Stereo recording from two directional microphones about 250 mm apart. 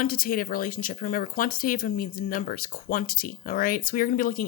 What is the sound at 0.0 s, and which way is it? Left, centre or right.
Speech, left.